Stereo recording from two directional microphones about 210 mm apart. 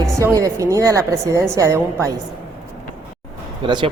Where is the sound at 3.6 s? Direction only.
25° right (ahead or behind).